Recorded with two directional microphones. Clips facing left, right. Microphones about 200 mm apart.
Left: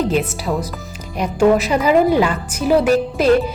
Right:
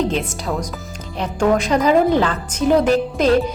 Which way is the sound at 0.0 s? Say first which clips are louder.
Left 2 dB; 5° left (ahead or behind).